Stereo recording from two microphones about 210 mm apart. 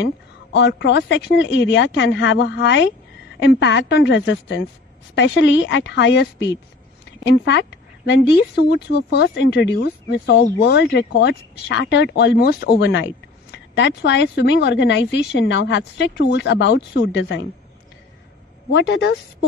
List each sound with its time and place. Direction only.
0.0 s speech: 60° left (ahead or behind)
7.4 s speech: 55° left (ahead or behind)
18.7 s speech: 60° left (ahead or behind)